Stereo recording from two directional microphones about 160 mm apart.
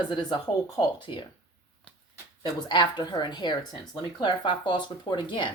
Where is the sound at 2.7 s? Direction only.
30° left (ahead or behind).